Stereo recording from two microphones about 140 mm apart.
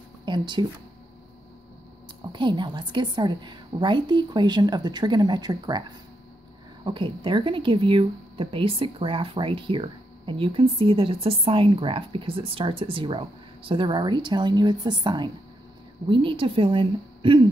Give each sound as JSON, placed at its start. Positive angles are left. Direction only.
{"t": 0.2, "sound": "speech", "side_deg": -35}
{"t": 2.3, "sound": "a woman's voice", "side_deg": -35}